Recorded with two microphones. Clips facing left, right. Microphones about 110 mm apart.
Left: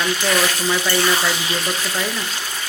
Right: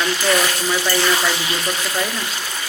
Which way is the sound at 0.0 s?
Centre (ahead or behind).